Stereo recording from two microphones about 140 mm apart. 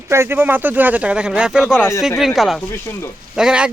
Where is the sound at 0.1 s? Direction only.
15° right (ahead or behind).